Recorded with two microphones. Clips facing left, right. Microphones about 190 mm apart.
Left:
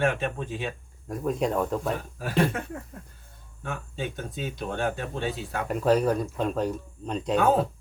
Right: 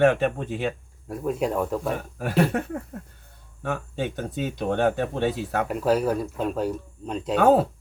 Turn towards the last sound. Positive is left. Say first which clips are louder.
# right 4 dB
turn(degrees=-65)  # may be behind; listen again after turning